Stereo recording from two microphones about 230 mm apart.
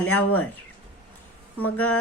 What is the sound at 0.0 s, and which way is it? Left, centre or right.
Speech, centre.